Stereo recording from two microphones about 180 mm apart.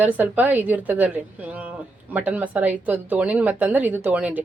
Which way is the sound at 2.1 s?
10° right (ahead or behind).